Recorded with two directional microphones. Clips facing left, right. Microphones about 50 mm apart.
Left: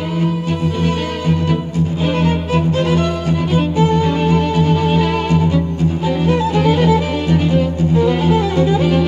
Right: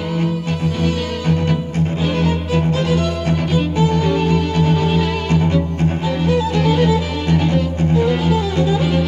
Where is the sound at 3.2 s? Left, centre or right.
Right.